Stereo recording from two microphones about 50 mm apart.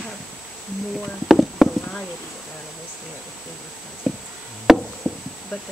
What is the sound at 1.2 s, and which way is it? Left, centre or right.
Speech, centre.